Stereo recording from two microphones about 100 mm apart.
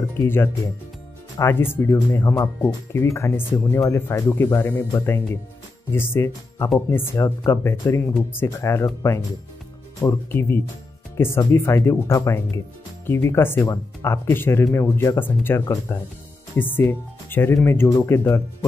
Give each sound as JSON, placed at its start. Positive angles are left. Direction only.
{"t": 1.4, "sound": "speech", "side_deg": 20}